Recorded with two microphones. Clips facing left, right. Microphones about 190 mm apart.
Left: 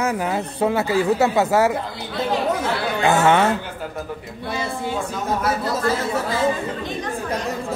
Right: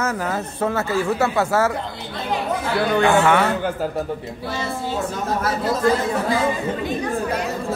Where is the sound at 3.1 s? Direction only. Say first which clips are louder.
Left 2 dB; 20° left (ahead or behind).